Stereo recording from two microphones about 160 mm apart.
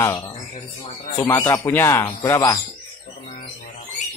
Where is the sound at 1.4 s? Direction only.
15° left (ahead or behind).